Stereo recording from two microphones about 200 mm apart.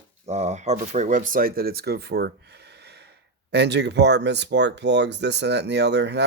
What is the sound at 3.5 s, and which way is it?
Speech, 60° right (ahead or behind).